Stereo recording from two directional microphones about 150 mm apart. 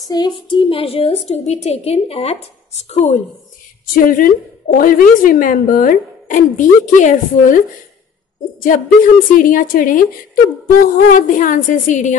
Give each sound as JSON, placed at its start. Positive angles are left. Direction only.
{"t": 0.1, "sound": "a woman's voice", "side_deg": 30}
{"t": 3.9, "sound": "a woman's voice", "side_deg": 65}
{"t": 11.1, "sound": "a woman's voice", "side_deg": 60}